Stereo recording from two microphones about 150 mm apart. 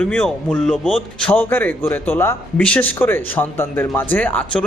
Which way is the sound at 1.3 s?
15° left (ahead or behind).